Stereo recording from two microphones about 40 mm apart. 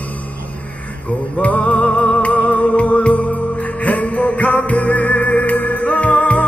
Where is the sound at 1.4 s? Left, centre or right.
Left.